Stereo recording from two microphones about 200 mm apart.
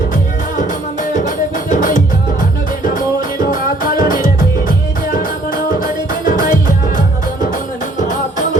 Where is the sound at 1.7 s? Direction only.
40° left (ahead or behind).